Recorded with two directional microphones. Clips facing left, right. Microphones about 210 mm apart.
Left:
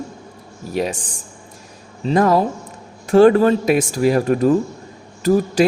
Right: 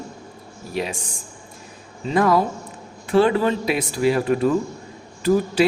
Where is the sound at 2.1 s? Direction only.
45° left (ahead or behind).